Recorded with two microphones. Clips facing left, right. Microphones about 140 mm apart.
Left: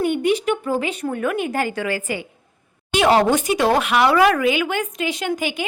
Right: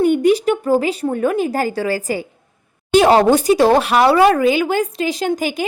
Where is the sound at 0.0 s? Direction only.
40° right (ahead or behind).